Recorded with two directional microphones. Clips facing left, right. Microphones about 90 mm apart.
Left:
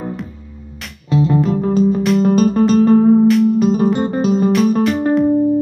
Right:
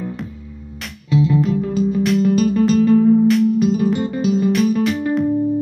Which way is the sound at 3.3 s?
Centre (ahead or behind).